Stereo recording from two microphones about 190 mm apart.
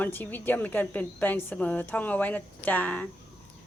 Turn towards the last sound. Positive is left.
turn(degrees=10)  # may be behind; listen again after turning